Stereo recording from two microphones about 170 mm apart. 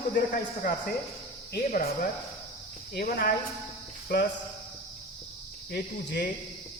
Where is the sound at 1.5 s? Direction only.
65° left (ahead or behind).